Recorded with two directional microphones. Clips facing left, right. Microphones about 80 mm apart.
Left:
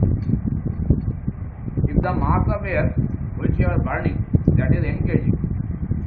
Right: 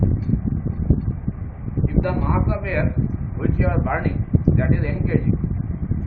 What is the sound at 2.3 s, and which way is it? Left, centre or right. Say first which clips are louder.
Speech: left 1 dB; centre.